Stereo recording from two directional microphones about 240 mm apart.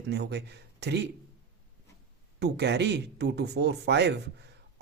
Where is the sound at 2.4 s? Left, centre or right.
Right.